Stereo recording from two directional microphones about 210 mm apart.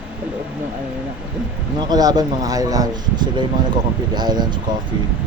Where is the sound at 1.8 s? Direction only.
20° right (ahead or behind).